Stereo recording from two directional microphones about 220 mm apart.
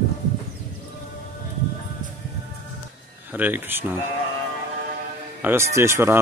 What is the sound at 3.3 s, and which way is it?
Speech, 10° right (ahead or behind).